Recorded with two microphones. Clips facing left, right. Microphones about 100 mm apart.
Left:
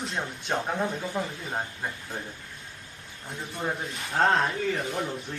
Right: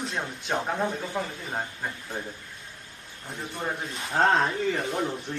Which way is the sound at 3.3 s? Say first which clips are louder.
Even; centre (ahead or behind).